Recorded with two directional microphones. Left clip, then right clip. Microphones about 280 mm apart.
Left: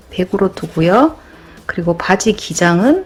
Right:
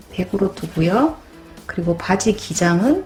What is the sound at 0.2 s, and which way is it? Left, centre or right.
Speech, centre.